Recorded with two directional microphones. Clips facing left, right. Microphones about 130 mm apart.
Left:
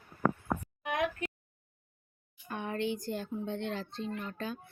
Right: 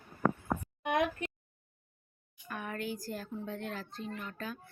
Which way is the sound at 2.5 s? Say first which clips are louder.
Left 4 dB; 25° left (ahead or behind).